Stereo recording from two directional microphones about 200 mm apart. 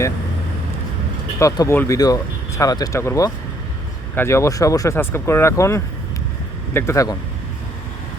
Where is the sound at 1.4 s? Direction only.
15° left (ahead or behind).